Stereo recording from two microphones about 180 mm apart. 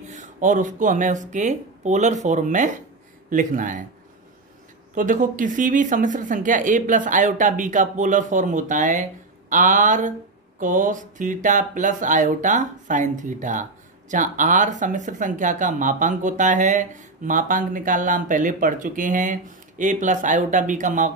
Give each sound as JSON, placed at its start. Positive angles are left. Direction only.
{"t": 0.1, "sound": "speech", "side_deg": -45}
{"t": 4.9, "sound": "speech", "side_deg": -50}